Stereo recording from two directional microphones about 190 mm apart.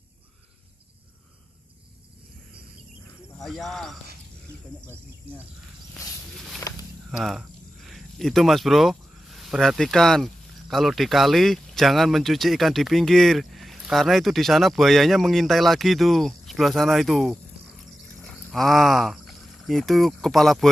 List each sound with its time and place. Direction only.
3.4 s speech: centre (ahead or behind)
6.7 s walk: 20° left (ahead or behind)
7.1 s speech: centre (ahead or behind)